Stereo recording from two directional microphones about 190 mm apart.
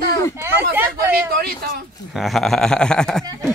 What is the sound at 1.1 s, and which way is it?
Speech, 55° right (ahead or behind).